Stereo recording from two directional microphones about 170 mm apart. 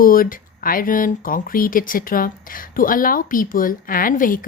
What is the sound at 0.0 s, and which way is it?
Speech, 55° left (ahead or behind).